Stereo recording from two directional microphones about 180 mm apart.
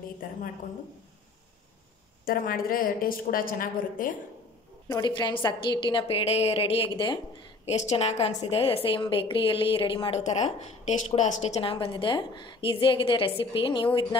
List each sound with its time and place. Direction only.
2.2 s a woman's voice: 55° left (ahead or behind)
4.8 s a woman's voice: 20° left (ahead or behind)